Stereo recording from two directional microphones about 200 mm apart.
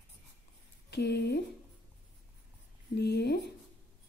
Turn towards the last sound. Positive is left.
turn(degrees=55)  # may be behind; listen again after turning